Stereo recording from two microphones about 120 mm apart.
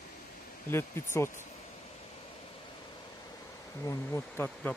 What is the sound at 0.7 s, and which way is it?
Speech, 20° left (ahead or behind).